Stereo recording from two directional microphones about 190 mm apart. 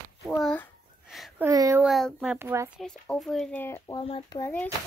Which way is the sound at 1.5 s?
15° right (ahead or behind).